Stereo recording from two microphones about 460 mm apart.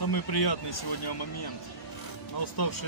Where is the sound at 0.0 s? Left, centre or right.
Left.